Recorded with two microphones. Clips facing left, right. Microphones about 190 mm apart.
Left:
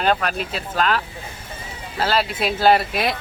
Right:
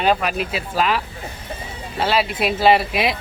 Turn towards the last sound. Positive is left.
turn(degrees=0)  # may be behind; listen again after turning